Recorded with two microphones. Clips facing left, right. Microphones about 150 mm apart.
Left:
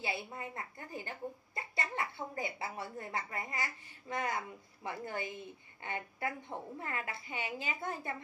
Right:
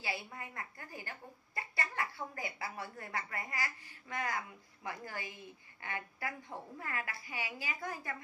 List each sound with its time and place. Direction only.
0.0 s a woman's voice: 20° left (ahead or behind)